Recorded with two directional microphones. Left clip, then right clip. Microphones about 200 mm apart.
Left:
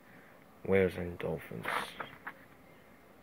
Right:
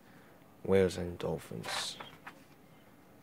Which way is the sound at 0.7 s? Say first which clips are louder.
Right 1 dB; 25° right (ahead or behind).